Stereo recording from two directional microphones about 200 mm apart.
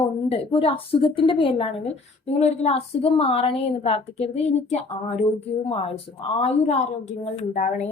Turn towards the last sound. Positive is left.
turn(degrees=35)  # may be behind; listen again after turning